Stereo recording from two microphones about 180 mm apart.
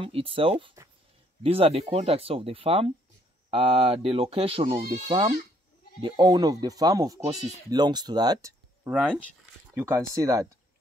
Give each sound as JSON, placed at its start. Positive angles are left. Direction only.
{"t": 0.0, "sound": "speech", "side_deg": -30}